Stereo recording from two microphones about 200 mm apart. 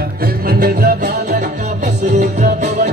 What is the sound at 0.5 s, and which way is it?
Music, 50° right (ahead or behind).